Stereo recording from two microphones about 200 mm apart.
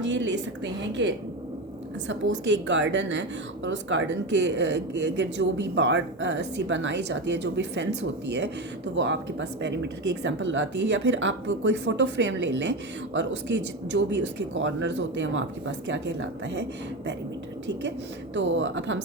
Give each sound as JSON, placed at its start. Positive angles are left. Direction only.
{"t": 0.0, "sound": "speech", "side_deg": -65}
{"t": 2.4, "sound": "speech", "side_deg": -65}
{"t": 18.3, "sound": "speech", "side_deg": -65}